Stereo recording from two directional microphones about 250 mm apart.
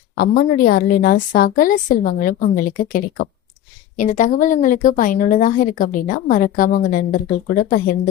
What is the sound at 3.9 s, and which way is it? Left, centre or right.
A woman's voice, left.